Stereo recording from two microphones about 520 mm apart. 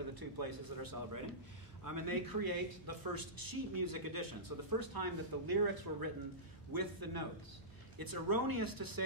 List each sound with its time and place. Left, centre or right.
0.1 s speech: right